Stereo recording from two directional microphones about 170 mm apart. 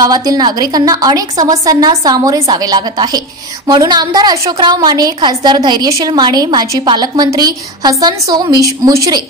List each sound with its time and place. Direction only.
0.0 s a woman's voice: 20° right (ahead or behind)